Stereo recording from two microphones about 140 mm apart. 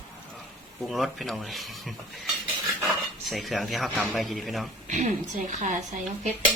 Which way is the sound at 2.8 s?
Centre (ahead or behind).